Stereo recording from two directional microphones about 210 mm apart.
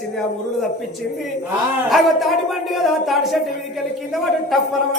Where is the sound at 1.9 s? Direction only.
Centre (ahead or behind).